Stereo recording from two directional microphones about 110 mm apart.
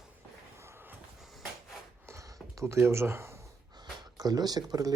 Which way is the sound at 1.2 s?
Centre (ahead or behind).